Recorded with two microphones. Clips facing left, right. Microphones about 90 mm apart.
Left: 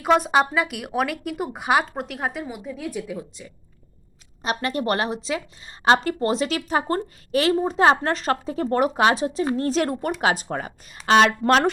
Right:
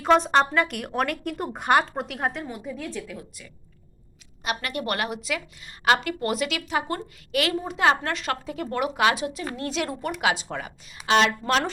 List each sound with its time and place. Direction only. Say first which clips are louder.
0.0 s speech: left 1 dB; 5° left (ahead or behind)
3.1 s a woman's voice: left 6 dB; 25° left (ahead or behind); by 11.7 s 55° left (ahead or behind)